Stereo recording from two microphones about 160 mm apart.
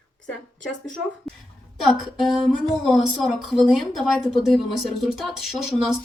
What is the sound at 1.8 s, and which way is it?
Speech, centre (ahead or behind).